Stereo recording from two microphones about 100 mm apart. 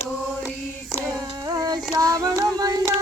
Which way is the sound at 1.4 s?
40° right (ahead or behind).